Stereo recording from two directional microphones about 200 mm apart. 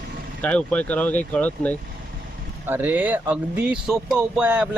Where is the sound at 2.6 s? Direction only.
10° right (ahead or behind).